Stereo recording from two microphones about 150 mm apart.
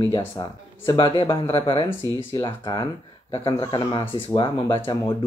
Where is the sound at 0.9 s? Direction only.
35° left (ahead or behind).